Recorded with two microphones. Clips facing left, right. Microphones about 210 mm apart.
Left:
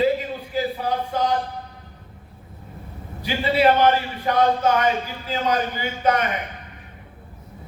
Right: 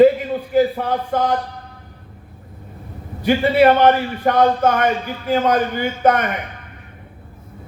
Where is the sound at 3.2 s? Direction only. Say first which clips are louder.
Right 6 dB; 55° right (ahead or behind).